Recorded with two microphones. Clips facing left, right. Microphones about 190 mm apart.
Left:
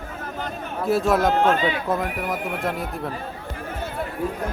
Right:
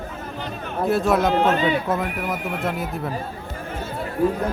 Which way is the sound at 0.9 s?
Centre (ahead or behind).